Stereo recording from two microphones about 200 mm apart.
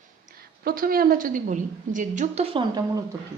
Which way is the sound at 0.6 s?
45° right (ahead or behind).